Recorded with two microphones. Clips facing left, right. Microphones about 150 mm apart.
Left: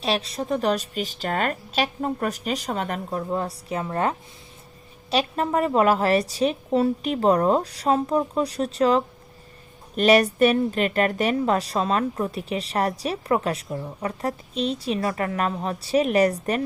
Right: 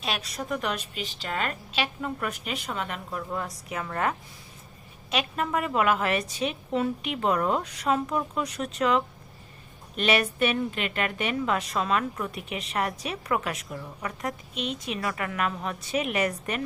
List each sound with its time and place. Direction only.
0.0 s a woman's voice: 30° left (ahead or behind)
5.1 s a woman's voice: 35° left (ahead or behind)